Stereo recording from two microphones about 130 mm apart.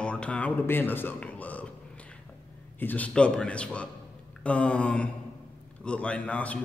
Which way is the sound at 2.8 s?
15° left (ahead or behind).